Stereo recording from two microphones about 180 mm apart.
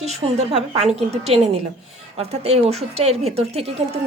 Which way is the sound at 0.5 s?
35° right (ahead or behind).